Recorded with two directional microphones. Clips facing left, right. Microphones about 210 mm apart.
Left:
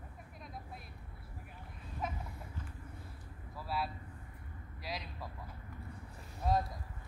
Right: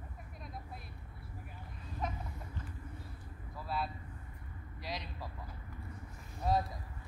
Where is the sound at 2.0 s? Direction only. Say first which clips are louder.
Right 1 dB; 5° left (ahead or behind).